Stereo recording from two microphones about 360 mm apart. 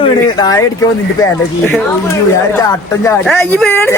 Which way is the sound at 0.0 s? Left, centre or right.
Centre.